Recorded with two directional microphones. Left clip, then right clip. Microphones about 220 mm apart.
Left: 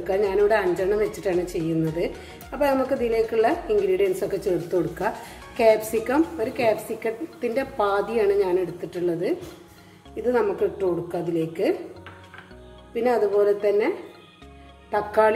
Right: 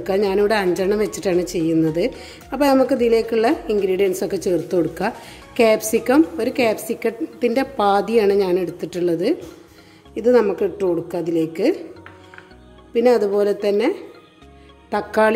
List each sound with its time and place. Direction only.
0.0 s a woman's voice: 50° right (ahead or behind)
12.9 s a woman's voice: 50° right (ahead or behind)